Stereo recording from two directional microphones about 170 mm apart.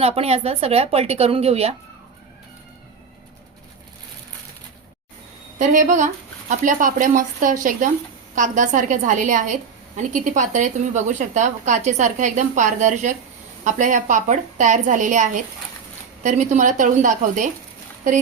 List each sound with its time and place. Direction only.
0.0 s speech: 35° right (ahead or behind)
5.5 s a woman's voice: 50° right (ahead or behind)